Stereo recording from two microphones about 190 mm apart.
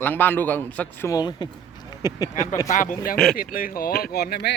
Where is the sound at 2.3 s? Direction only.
40° left (ahead or behind).